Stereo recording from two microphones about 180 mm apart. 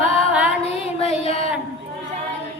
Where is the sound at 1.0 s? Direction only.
35° left (ahead or behind).